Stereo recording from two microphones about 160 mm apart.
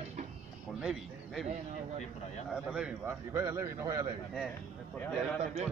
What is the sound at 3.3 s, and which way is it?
Speech, 20° right (ahead or behind).